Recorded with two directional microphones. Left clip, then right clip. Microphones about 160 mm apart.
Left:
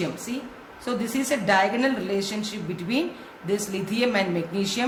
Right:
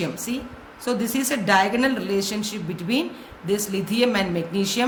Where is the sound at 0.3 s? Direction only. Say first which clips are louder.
Right 2 dB; 30° right (ahead or behind).